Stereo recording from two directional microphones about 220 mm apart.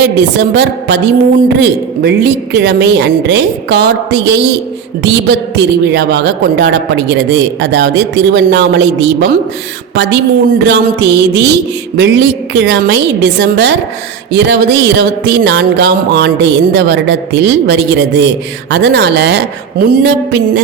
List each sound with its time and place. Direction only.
0.0 s a woman's voice: 50° right (ahead or behind)